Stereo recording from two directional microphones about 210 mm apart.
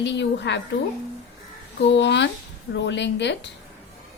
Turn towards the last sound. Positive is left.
turn(degrees=55)  # may be behind; listen again after turning